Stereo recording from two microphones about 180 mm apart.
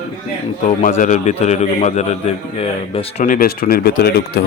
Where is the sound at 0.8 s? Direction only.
50° left (ahead or behind).